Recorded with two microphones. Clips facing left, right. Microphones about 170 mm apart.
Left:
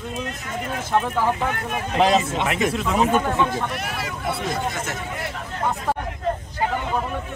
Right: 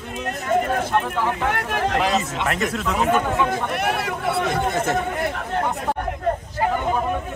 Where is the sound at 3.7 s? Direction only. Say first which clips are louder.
Right 6 dB; 60° right (ahead or behind).